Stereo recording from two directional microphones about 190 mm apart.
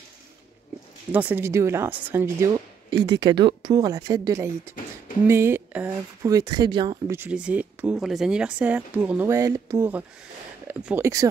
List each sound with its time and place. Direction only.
1.1 s speech: 10° right (ahead or behind)
4.8 s a sound: 45° left (ahead or behind)
5.2 s speech: 10° right (ahead or behind)
7.2 s speech: 5° right (ahead or behind)